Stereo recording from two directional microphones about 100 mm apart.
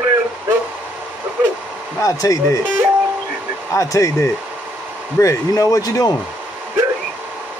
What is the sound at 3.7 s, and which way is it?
Speech, 35° left (ahead or behind).